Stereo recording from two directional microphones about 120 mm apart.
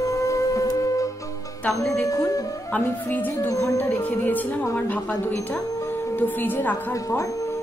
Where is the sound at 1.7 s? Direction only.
25° left (ahead or behind).